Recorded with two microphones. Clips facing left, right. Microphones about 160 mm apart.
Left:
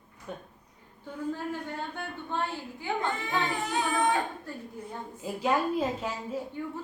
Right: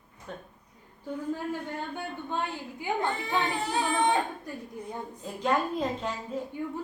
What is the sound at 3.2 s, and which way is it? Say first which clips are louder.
Singing: right 1 dB; 30° right (ahead or behind).